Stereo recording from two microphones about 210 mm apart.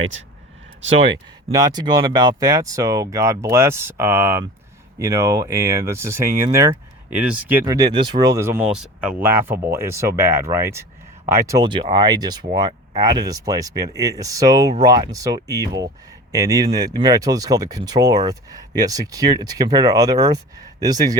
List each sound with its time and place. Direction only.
1.0 s speech: 20° right (ahead or behind)
7.6 s speech: 20° right (ahead or behind)
8.4 s speech: 5° right (ahead or behind)